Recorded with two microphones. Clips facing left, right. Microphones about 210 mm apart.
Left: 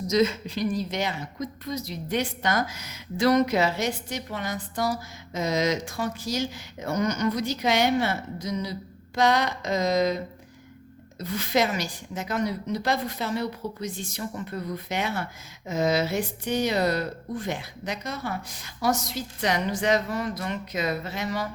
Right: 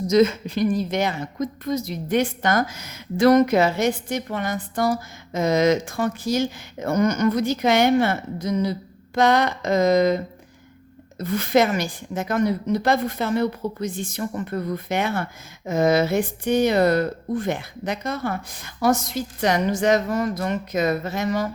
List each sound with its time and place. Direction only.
0.1 s a woman's voice: 55° right (ahead or behind)
11.2 s a woman's voice: 55° right (ahead or behind)